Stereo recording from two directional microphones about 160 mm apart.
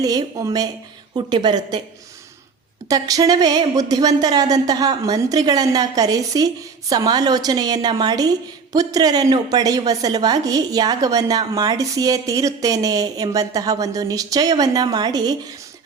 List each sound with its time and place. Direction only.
0.0 s a woman's voice: 20° right (ahead or behind)
2.9 s a woman's voice: 20° right (ahead or behind)